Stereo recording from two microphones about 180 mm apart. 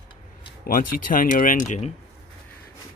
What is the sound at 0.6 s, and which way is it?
Speech, 50° left (ahead or behind).